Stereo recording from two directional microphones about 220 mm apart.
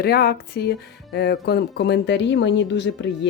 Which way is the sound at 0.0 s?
45° left (ahead or behind).